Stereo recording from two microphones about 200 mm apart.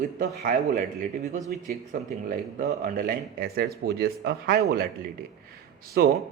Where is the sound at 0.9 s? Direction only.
40° right (ahead or behind).